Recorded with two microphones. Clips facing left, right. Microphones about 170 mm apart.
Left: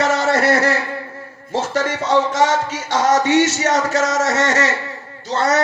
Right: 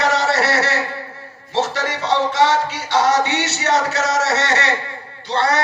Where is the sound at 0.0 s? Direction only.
50° left (ahead or behind).